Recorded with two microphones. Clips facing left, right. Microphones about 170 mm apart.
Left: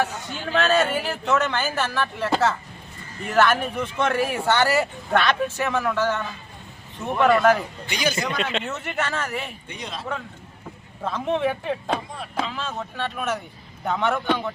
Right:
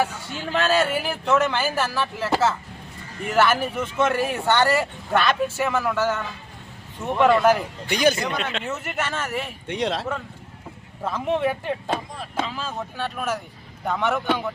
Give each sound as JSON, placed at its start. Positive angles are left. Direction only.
{"t": 0.7, "sound": "speech", "side_deg": -10}
{"t": 7.3, "sound": "speech", "side_deg": -5}
{"t": 7.9, "sound": "speech", "side_deg": -55}
{"t": 8.1, "sound": "speech", "side_deg": 0}
{"t": 9.6, "sound": "speech", "side_deg": -85}
{"t": 11.0, "sound": "speech", "side_deg": -5}